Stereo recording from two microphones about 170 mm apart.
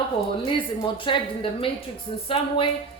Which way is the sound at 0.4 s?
30° left (ahead or behind).